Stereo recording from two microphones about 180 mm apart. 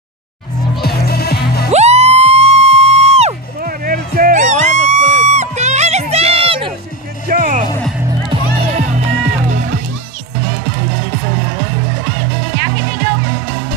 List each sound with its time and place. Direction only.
0.7 s music: 60° left (ahead or behind)
1.7 s music: 35° right (ahead or behind)
3.6 s music: 50° right (ahead or behind)
5.0 s a sound: 90° left
5.3 s music: 40° right (ahead or behind)
7.2 s music: 50° right (ahead or behind)
8.7 s music: 40° right (ahead or behind)